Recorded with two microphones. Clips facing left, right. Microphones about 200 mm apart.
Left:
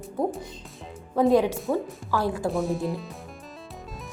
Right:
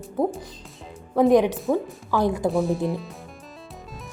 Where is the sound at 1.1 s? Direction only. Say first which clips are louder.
Right 3 dB; 15° right (ahead or behind).